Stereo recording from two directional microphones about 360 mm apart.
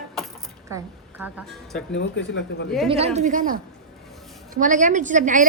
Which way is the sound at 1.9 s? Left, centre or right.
Left.